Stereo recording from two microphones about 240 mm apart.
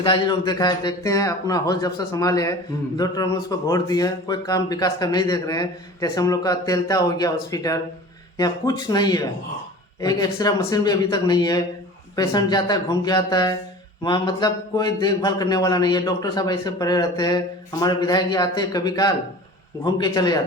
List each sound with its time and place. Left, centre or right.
0.0 s speech: centre